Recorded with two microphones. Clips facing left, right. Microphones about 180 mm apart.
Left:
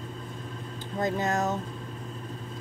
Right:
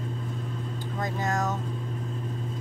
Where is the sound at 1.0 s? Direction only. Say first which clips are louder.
Left 2 dB; 25° left (ahead or behind).